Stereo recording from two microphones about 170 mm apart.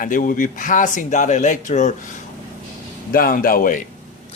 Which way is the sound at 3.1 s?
60° left (ahead or behind).